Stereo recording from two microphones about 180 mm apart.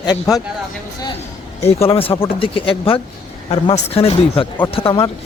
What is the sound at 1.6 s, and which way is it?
Speech, 35° left (ahead or behind).